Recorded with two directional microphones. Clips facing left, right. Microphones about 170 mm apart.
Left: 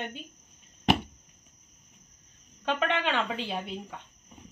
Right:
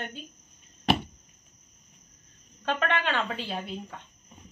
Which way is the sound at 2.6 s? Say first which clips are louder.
Even; 15° left (ahead or behind).